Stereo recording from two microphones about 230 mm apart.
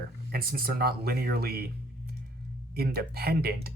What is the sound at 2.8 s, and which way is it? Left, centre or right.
Speech, right.